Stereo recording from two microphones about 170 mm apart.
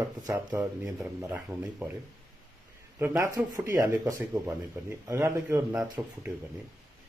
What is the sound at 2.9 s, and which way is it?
Speech, 15° right (ahead or behind).